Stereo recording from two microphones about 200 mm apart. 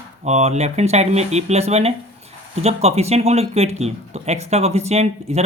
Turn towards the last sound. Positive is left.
turn(degrees=-30)  # may be behind; listen again after turning